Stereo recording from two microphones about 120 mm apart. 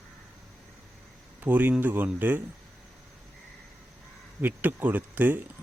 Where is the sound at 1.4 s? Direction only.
15° right (ahead or behind).